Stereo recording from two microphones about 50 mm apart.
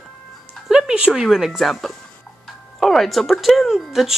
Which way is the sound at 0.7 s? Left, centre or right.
Centre.